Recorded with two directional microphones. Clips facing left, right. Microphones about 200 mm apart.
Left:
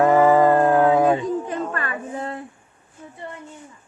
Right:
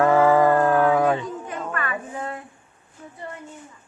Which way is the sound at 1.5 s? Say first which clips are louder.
Left 2 dB; 30° left (ahead or behind).